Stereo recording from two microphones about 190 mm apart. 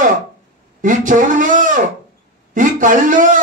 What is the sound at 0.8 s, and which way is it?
Speech, 45° right (ahead or behind).